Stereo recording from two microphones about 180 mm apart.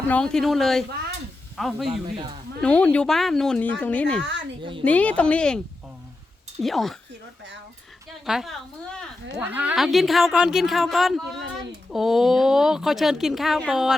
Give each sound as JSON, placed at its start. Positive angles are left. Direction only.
{"t": 0.1, "sound": "speech", "side_deg": 5}
{"t": 2.1, "sound": "speech", "side_deg": -25}
{"t": 2.6, "sound": "speech", "side_deg": 5}
{"t": 4.2, "sound": "speech", "side_deg": -80}
{"t": 4.8, "sound": "speech", "side_deg": 10}
{"t": 6.6, "sound": "speech", "side_deg": 0}
{"t": 8.2, "sound": "speech", "side_deg": 0}